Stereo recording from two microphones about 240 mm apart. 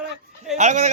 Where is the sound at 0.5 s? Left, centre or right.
Right.